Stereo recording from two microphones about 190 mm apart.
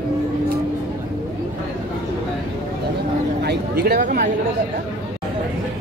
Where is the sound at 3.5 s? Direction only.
55° right (ahead or behind).